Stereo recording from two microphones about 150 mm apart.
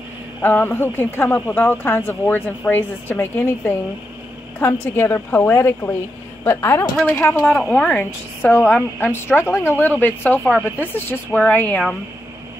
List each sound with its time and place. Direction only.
0.4 s a woman's voice: 15° left (ahead or behind)
9.0 s speech: 15° left (ahead or behind)